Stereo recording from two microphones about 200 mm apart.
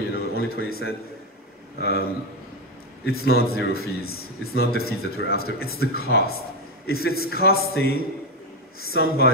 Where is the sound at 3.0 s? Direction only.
50° left (ahead or behind).